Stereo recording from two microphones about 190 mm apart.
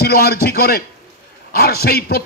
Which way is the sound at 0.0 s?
55° left (ahead or behind).